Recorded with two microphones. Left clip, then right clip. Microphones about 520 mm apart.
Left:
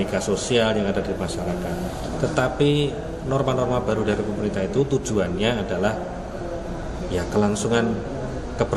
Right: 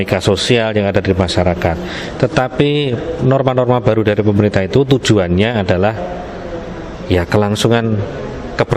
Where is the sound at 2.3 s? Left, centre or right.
Right.